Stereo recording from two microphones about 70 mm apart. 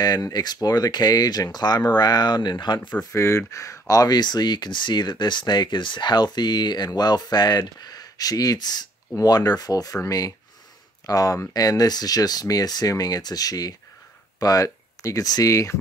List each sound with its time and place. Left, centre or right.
0.0 s speech: left
3.0 s speech: left
7.0 s speech: left